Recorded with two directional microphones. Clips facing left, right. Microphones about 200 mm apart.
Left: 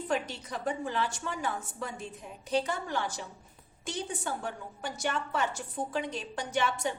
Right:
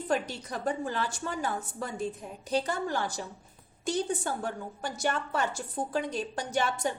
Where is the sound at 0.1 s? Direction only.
35° right (ahead or behind).